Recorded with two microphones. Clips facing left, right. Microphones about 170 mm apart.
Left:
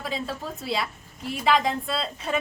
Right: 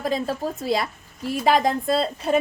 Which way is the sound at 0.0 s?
45° right (ahead or behind).